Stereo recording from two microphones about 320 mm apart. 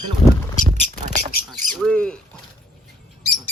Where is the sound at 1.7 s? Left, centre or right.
Centre.